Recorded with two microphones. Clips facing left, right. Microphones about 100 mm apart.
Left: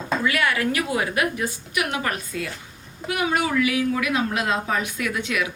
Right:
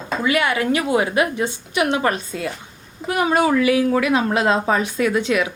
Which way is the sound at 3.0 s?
35° right (ahead or behind).